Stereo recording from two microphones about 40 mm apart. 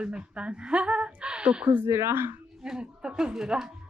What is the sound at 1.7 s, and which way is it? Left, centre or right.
Speech, right.